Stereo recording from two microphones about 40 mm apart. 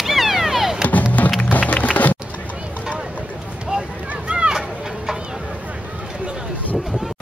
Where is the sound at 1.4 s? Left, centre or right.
Left.